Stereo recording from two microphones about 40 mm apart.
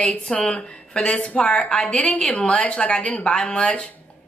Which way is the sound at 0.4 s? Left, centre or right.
Left.